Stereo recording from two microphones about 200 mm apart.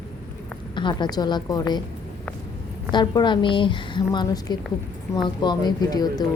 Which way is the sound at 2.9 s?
20° left (ahead or behind).